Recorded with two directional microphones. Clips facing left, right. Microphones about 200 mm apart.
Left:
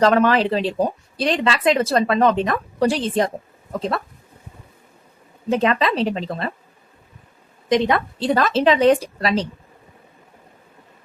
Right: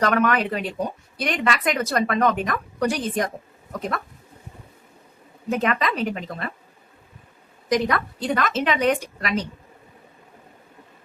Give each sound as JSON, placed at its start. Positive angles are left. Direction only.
{"t": 0.0, "sound": "speech", "side_deg": 30}
{"t": 5.5, "sound": "speech", "side_deg": 30}
{"t": 7.7, "sound": "a woman's voice", "side_deg": 25}